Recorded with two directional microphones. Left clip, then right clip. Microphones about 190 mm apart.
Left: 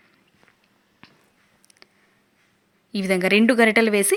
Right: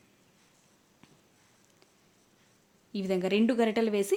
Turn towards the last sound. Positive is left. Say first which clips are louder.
# left 10 dB
turn(degrees=15)  # may be behind; listen again after turning